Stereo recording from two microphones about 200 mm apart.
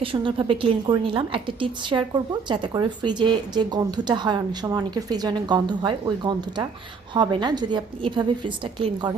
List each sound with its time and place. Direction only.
0.0 s a woman's voice: 25° right (ahead or behind)